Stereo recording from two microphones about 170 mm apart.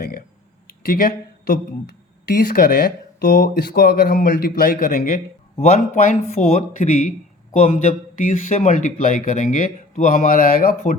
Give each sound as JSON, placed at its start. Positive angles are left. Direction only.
{"t": 0.7, "sound": "speech", "side_deg": 60}
{"t": 5.5, "sound": "speech", "side_deg": 40}
{"t": 8.1, "sound": "speech", "side_deg": 50}